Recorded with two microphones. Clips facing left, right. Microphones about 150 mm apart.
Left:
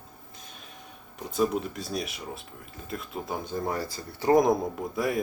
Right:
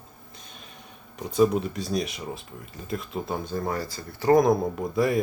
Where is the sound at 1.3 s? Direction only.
Centre (ahead or behind).